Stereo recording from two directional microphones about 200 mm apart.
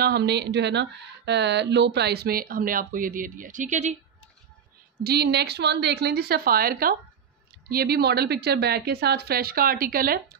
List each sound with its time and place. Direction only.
0.0 s speech: 55° right (ahead or behind); by 4.0 s 35° right (ahead or behind)
5.0 s speech: 55° right (ahead or behind)